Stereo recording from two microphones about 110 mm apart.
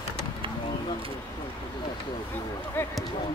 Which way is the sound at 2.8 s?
15° left (ahead or behind).